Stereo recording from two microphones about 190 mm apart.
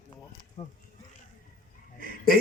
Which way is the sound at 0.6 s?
35° left (ahead or behind).